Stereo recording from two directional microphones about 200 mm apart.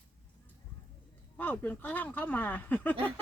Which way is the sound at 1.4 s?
10° left (ahead or behind).